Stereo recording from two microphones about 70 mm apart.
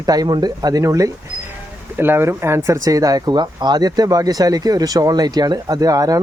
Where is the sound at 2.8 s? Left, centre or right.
Right.